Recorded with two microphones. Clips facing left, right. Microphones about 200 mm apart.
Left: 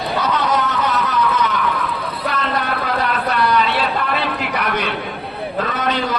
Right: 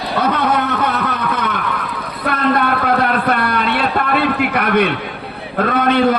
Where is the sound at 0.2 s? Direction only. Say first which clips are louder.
Right 4 dB; 55° right (ahead or behind).